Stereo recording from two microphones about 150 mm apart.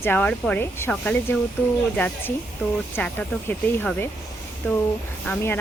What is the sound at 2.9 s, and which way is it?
Speech, 10° left (ahead or behind).